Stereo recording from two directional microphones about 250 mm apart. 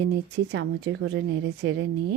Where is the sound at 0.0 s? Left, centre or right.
Right.